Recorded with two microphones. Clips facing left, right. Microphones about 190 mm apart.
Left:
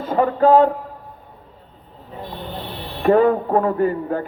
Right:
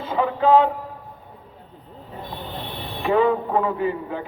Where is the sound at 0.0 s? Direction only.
45° left (ahead or behind).